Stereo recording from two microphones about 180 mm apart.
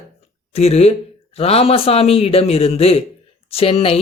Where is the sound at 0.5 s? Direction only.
35° left (ahead or behind).